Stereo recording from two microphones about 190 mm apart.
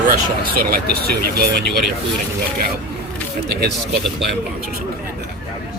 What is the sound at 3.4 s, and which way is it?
Speech, 60° right (ahead or behind).